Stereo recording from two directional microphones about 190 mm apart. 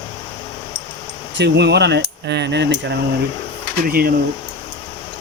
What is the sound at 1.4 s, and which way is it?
Speech, 65° right (ahead or behind).